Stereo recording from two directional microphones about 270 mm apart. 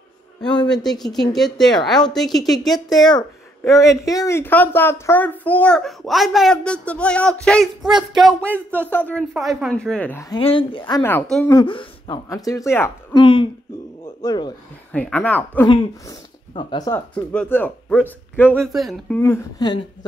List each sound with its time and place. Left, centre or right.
0.7 s speech: centre
3.1 s speech: centre
10.4 s speech: centre
14.9 s speech: centre